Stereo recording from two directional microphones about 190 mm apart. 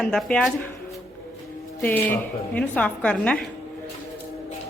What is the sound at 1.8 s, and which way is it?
A woman's voice, 10° left (ahead or behind).